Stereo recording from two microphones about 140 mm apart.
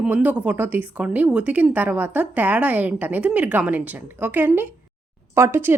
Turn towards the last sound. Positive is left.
turn(degrees=-15)  # may be behind; listen again after turning